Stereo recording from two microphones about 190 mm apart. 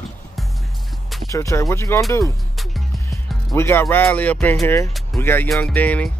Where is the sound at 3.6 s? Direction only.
10° left (ahead or behind).